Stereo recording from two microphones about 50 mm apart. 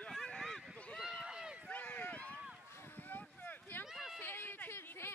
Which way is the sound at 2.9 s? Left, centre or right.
Left.